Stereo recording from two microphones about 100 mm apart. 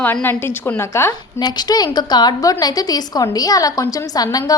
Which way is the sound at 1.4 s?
40° left (ahead or behind).